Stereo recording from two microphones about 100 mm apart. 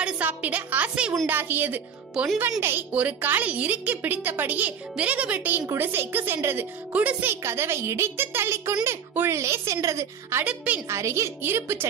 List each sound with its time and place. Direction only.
0.0 s a woman's voice: 15° right (ahead or behind)
2.1 s a woman's voice: 10° right (ahead or behind)
7.4 s a woman's voice: 25° right (ahead or behind)
10.4 s a woman's voice: 15° right (ahead or behind)
10.9 s a woman's voice: 30° right (ahead or behind)